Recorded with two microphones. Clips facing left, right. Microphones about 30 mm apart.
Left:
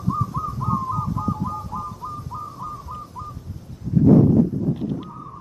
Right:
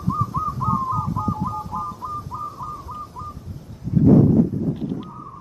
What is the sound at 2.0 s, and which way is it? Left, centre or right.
Bird, centre.